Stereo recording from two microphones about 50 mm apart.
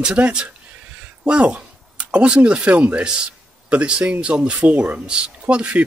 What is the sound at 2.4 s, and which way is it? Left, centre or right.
Speech, right.